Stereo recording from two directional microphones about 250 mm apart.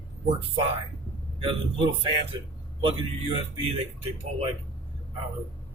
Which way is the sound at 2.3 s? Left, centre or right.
Centre.